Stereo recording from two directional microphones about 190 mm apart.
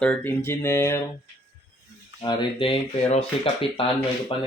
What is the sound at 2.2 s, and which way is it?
Speech, 25° left (ahead or behind).